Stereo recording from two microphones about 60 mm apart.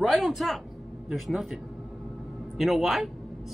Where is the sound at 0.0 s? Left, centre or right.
Centre.